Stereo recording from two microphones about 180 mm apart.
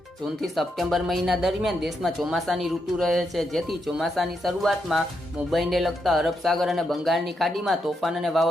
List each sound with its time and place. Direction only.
0.4 s speech: centre (ahead or behind)